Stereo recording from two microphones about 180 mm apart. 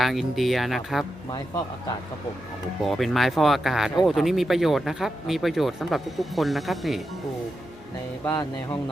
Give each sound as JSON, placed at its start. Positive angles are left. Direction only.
{"t": 0.0, "sound": "speech", "side_deg": 0}
{"t": 2.8, "sound": "speech", "side_deg": 0}
{"t": 8.2, "sound": "speech", "side_deg": 20}